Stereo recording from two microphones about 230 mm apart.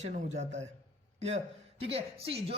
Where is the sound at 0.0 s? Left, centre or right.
Right.